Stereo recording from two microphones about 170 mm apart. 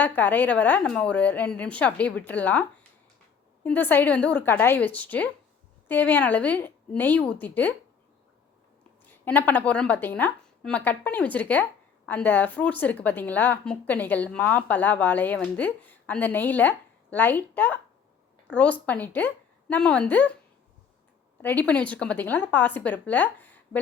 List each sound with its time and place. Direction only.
0.0 s a woman's voice: 10° left (ahead or behind)
9.0 s a woman's voice: 10° left (ahead or behind)
21.4 s a woman's voice: 10° left (ahead or behind)